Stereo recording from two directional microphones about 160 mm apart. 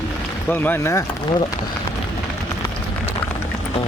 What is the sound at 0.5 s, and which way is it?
Speech, 10° left (ahead or behind).